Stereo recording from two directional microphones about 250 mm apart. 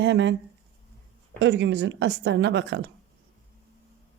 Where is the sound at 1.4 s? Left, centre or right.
Right.